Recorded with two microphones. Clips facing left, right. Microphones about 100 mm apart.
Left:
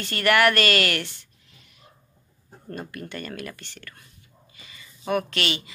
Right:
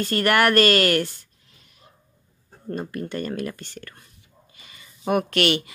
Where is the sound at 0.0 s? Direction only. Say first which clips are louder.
Right 1 dB; 40° right (ahead or behind).